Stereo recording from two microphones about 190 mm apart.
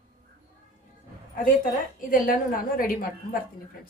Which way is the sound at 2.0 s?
45° left (ahead or behind).